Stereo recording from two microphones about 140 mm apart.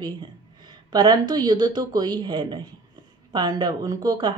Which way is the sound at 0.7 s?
30° right (ahead or behind).